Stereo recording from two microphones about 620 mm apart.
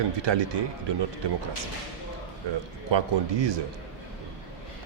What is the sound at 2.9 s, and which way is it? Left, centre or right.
Speech, right.